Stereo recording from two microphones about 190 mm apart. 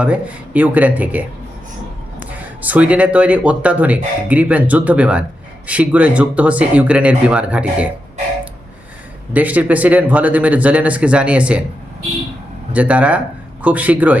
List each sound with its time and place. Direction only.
0.0 s speech: 5° right (ahead or behind)
2.3 s speech: 10° right (ahead or behind)
9.3 s speech: 10° right (ahead or behind)
12.7 s speech: 5° right (ahead or behind)